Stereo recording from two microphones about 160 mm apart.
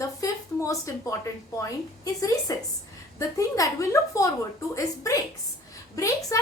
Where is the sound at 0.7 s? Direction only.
20° left (ahead or behind).